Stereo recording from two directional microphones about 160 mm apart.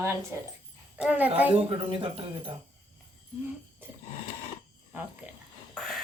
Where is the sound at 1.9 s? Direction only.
35° right (ahead or behind).